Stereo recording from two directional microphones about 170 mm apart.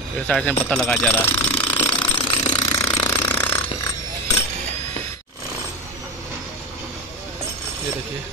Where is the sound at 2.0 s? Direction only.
30° left (ahead or behind).